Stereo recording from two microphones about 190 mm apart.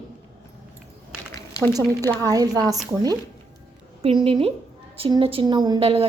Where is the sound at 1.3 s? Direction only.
20° left (ahead or behind).